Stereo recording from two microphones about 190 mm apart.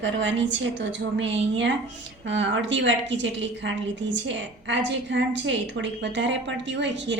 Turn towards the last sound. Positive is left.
turn(degrees=-70)  # may be behind; listen again after turning